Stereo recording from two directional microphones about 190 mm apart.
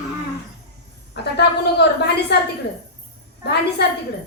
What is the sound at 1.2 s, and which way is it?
A woman's voice, 60° left (ahead or behind).